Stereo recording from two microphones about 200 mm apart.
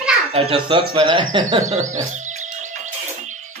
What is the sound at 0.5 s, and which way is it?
Speech, 25° right (ahead or behind).